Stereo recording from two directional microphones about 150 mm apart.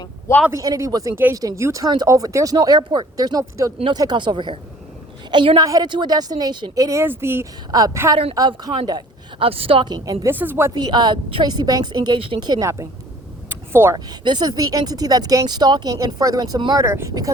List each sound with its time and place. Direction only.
0.5 s a woman's voice: 20° right (ahead or behind)
8.1 s a woman's voice: 40° right (ahead or behind)
8.4 s a woman's voice: 25° right (ahead or behind)
10.2 s speech: 15° right (ahead or behind)
10.8 s speech: 30° right (ahead or behind)
13.5 s vehicle: 15° right (ahead or behind)
13.9 s speech: 30° right (ahead or behind)
16.8 s speech: 20° right (ahead or behind)